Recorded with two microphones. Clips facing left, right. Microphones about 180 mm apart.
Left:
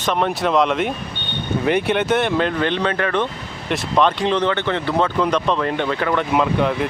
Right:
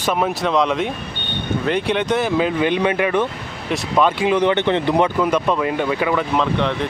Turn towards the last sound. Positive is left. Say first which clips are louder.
# left 1 dB
turn(degrees=5)  # may be behind; listen again after turning